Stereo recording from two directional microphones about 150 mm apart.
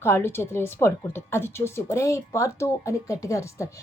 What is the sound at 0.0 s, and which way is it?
Speech, 15° left (ahead or behind).